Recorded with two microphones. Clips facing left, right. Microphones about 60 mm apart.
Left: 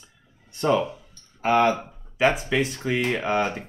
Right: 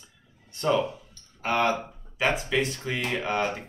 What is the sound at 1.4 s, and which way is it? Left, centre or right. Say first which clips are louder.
Speech: left 5 dB; centre.